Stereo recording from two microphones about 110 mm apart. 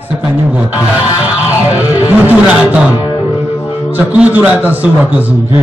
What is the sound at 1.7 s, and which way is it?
Music, 15° right (ahead or behind).